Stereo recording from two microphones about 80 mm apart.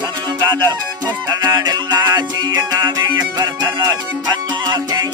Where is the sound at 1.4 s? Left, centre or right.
Right.